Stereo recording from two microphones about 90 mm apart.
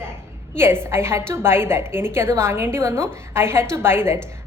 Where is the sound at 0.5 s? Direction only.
25° right (ahead or behind).